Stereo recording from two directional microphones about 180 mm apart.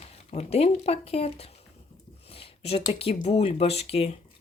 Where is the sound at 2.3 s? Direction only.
30° left (ahead or behind).